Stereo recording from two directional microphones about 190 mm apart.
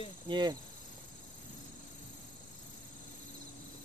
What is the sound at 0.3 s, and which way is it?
Cricket, 25° right (ahead or behind).